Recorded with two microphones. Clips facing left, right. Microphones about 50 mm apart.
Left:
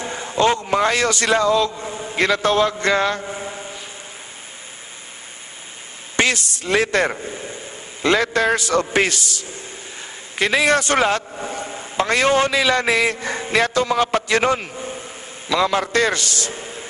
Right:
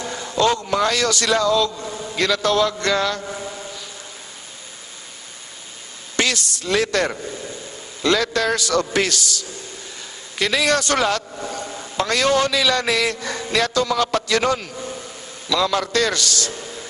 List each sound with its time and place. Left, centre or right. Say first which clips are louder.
0.0 s a man's voice: left 1 dB; left
3.2 s a sound: left 1 dB; centre
6.1 s a man's voice: left 2 dB; left
14.8 s vehicle: left 1 dB; centre
15.4 s a man's voice: left 1 dB; left